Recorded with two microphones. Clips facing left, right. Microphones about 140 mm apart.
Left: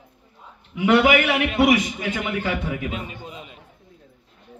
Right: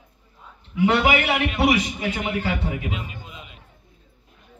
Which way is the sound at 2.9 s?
35° left (ahead or behind).